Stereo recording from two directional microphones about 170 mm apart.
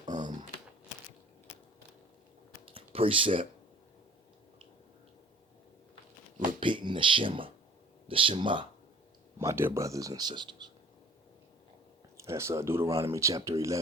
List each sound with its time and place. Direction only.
0.1 s typing: 25° right (ahead or behind)
2.6 s a sound: 35° right (ahead or behind)
6.6 s speech: 30° right (ahead or behind)
9.4 s speech: 15° right (ahead or behind)
12.1 s speech: 15° right (ahead or behind)